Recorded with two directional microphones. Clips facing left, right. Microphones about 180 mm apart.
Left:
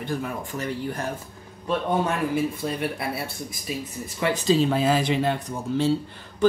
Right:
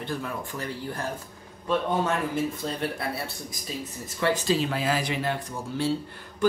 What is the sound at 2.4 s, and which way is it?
Speech, 10° left (ahead or behind).